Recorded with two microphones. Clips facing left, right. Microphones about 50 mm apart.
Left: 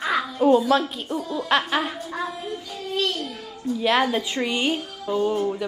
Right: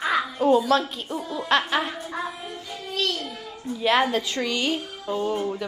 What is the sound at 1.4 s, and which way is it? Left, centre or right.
Speech, centre.